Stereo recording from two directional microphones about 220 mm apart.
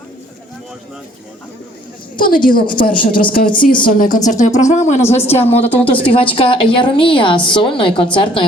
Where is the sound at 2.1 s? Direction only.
40° left (ahead or behind).